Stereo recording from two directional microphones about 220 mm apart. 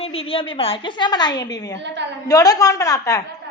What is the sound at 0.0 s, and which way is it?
A woman's voice, 25° left (ahead or behind).